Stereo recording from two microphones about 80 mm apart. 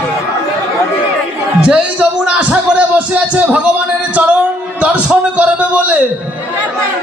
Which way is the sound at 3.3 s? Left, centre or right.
Centre.